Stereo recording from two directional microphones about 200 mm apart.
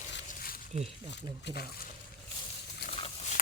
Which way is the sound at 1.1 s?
60° left (ahead or behind).